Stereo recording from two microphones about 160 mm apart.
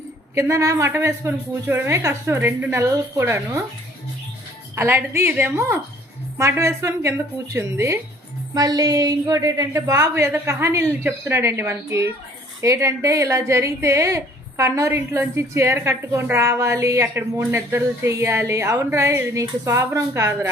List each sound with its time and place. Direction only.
0.3 s a woman's voice: 20° right (ahead or behind)
4.7 s a woman's voice: 15° right (ahead or behind)